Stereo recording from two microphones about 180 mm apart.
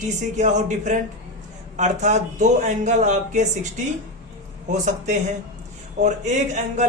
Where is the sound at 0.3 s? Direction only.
40° right (ahead or behind).